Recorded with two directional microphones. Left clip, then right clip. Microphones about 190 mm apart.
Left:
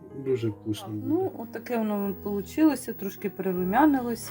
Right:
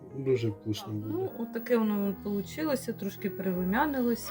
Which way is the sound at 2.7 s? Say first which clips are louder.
Right 1 dB; 40° left (ahead or behind).